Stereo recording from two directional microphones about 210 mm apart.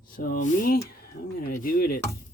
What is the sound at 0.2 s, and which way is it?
Speech, 40° left (ahead or behind).